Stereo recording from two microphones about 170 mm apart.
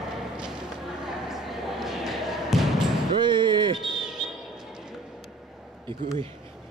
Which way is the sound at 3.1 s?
25° right (ahead or behind).